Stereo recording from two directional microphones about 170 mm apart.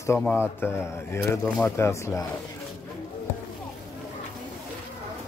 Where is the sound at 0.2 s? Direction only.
10° left (ahead or behind).